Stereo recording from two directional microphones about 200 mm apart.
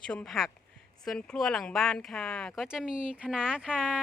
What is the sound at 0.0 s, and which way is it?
Speech, 5° left (ahead or behind).